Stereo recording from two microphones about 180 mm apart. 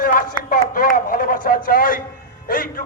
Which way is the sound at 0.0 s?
50° left (ahead or behind).